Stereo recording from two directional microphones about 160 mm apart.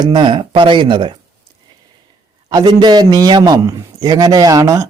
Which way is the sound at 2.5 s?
25° right (ahead or behind).